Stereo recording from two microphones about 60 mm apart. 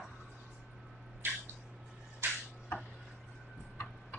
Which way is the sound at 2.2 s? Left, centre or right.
Right.